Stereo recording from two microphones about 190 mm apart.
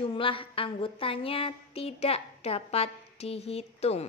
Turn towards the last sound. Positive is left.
turn(degrees=35)  # may be behind; listen again after turning